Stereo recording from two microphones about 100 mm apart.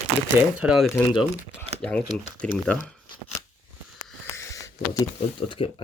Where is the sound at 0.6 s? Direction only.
5° right (ahead or behind).